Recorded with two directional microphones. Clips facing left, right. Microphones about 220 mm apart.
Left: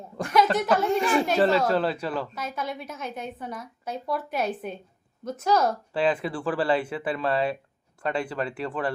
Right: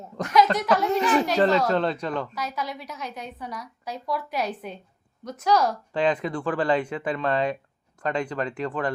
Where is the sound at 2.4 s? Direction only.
50° left (ahead or behind).